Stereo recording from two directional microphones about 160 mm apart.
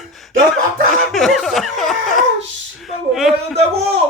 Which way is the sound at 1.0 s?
Centre (ahead or behind).